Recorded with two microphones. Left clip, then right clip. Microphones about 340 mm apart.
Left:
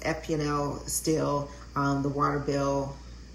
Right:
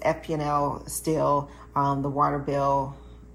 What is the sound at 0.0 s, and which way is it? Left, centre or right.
Speech, centre.